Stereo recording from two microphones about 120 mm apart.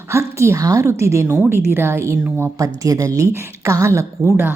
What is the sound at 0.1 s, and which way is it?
Speech, 20° right (ahead or behind).